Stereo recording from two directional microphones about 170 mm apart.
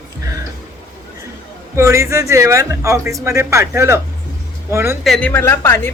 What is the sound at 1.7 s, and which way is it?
Speech, 15° right (ahead or behind).